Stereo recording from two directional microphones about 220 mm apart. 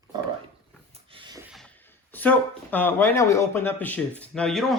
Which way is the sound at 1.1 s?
20° right (ahead or behind).